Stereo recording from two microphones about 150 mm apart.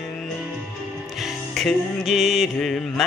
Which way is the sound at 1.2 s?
Centre (ahead or behind).